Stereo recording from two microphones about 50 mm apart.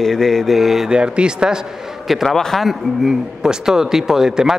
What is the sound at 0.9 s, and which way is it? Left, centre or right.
Speech, centre.